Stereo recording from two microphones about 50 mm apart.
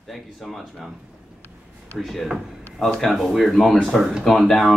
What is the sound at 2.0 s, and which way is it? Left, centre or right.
Speech, centre.